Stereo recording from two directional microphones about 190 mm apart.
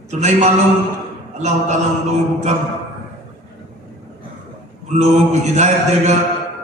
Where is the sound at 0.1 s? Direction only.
35° right (ahead or behind).